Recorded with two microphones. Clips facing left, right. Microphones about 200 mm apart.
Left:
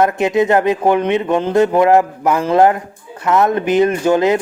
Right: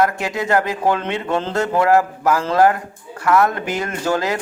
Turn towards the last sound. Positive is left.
turn(degrees=20)  # may be behind; listen again after turning